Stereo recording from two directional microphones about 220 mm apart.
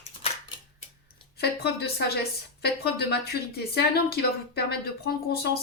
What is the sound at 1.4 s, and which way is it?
Speech, 45° left (ahead or behind).